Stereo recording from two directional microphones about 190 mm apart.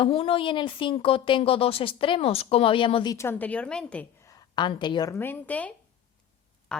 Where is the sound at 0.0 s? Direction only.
30° left (ahead or behind).